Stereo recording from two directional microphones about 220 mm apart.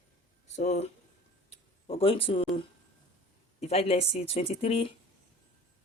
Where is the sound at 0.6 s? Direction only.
30° left (ahead or behind).